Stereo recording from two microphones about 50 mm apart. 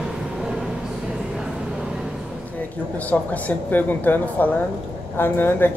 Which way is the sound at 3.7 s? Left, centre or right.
Left.